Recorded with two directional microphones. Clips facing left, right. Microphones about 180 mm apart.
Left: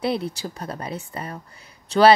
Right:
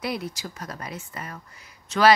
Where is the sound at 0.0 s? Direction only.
30° left (ahead or behind).